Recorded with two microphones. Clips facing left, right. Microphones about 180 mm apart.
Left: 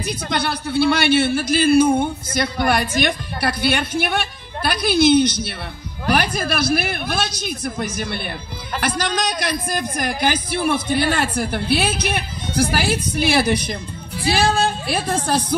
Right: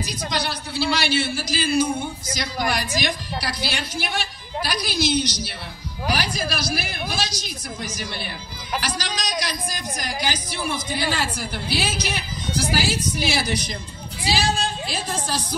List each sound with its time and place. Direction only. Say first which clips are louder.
0.0 s a woman's voice: left 4 dB; 55° left (ahead or behind)